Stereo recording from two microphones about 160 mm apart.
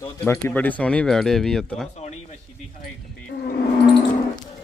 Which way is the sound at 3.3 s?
90° left.